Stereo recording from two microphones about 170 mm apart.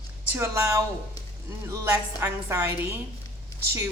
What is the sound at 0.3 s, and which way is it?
A woman's voice, 15° right (ahead or behind).